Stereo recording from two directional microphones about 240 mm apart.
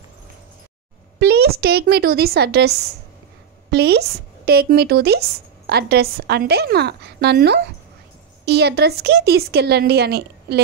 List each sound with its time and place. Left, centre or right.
1.2 s speech: right
3.7 s speech: right